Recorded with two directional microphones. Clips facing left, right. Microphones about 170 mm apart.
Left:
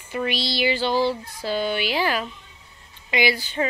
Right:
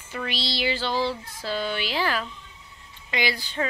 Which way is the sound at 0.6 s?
10° left (ahead or behind).